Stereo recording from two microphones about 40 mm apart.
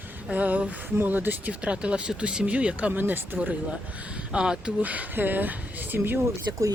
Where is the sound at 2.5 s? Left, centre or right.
Right.